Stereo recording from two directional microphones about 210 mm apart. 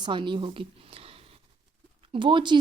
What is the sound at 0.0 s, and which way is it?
A woman's voice, 20° right (ahead or behind).